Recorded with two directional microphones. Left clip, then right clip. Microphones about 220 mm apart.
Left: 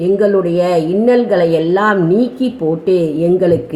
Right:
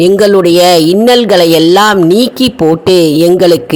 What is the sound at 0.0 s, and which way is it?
Speech, 45° right (ahead or behind).